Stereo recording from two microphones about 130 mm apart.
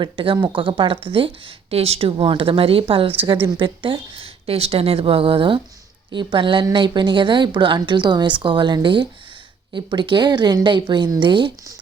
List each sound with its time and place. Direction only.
0.0 s a woman's voice: 40° right (ahead or behind)